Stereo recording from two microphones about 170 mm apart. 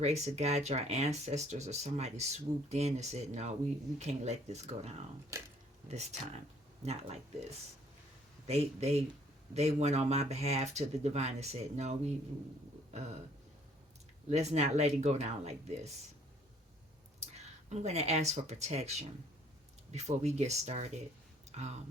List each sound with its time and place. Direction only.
0.0 s speech: 40° right (ahead or behind)
8.4 s speech: 40° right (ahead or behind)
14.3 s speech: 40° right (ahead or behind)
17.2 s speech: 40° right (ahead or behind)